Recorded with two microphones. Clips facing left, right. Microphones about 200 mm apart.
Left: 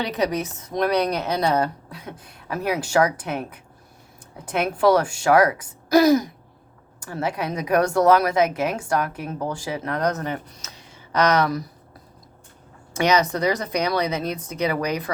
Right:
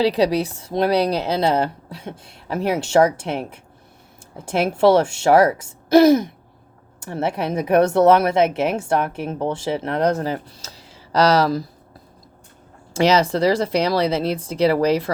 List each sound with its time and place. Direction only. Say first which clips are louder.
0.0 s speech: right 6 dB; 30° right (ahead or behind)
7.0 s speech: right 3 dB; 25° right (ahead or behind)
12.9 s speech: right 3 dB; 30° right (ahead or behind)